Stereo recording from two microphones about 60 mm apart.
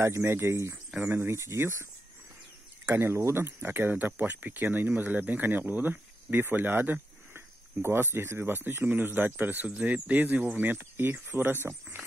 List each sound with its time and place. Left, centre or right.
0.0 s speech: right
2.9 s speech: right